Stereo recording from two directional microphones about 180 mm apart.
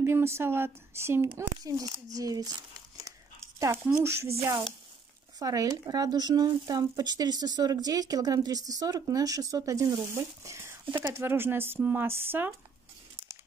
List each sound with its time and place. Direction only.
0.0 s speech: 15° right (ahead or behind)
3.1 s a sound: 15° right (ahead or behind)
5.4 s speech: 20° right (ahead or behind)